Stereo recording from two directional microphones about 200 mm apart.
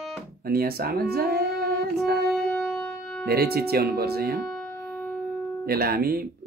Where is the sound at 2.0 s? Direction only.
55° right (ahead or behind).